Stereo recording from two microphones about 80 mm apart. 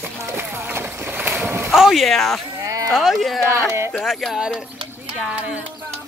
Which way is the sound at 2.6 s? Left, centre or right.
Right.